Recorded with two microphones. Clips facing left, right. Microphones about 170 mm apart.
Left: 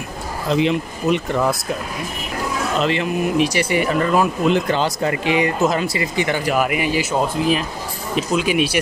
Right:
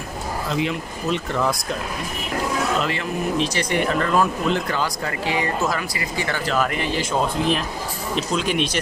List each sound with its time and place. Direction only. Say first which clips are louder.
0.5 s speech: left 8 dB; 20° left (ahead or behind)
2.8 s speech: left 5 dB; 20° left (ahead or behind)
4.6 s speech: left 6 dB; 25° left (ahead or behind); by 8.7 s 10° left (ahead or behind)